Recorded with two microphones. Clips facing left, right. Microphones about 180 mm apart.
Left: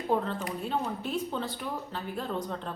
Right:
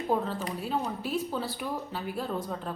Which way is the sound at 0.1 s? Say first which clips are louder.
Left 1 dB; 5° right (ahead or behind).